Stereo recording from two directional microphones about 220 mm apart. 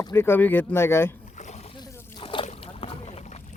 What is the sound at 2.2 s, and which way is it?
Boat, 25° left (ahead or behind).